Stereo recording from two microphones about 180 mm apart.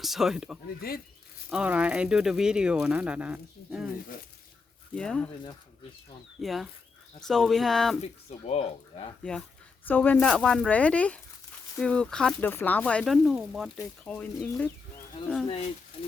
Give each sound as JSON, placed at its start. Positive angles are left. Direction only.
{"t": 0.0, "sound": "speech", "side_deg": 0}
{"t": 0.8, "sound": "speech", "side_deg": 55}
{"t": 1.5, "sound": "speech", "side_deg": -5}
{"t": 4.9, "sound": "speech", "side_deg": 5}
{"t": 6.4, "sound": "speech", "side_deg": 0}
{"t": 8.0, "sound": "speech", "side_deg": 35}
{"t": 9.8, "sound": "speech", "side_deg": 10}